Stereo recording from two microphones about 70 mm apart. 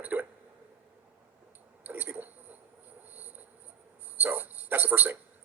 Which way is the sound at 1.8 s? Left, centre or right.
Right.